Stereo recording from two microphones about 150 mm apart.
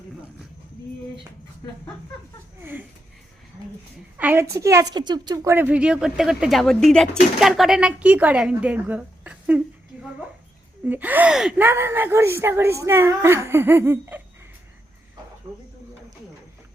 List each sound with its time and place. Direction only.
2.6 s a sound: 15° right (ahead or behind)
4.2 s speech: 15° right (ahead or behind)
10.8 s speech: 10° right (ahead or behind)